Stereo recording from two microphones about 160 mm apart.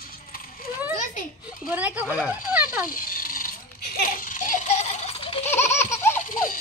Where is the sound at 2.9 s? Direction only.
60° left (ahead or behind); by 5.4 s 40° left (ahead or behind).